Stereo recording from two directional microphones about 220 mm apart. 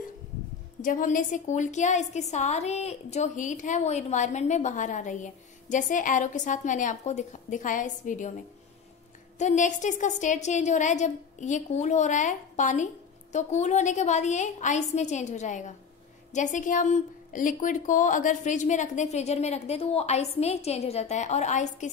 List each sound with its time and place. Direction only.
0.8 s a woman's voice: 35° left (ahead or behind)
9.4 s a woman's voice: 35° left (ahead or behind)